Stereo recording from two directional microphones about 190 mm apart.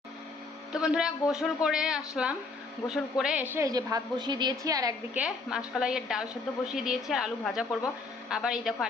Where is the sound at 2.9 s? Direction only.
Centre (ahead or behind); by 5.2 s 20° right (ahead or behind).